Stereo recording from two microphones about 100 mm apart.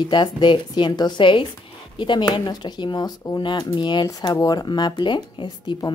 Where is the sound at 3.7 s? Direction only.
50° left (ahead or behind).